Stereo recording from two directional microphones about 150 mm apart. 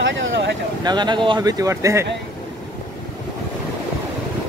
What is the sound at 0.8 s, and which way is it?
Speech, 30° right (ahead or behind).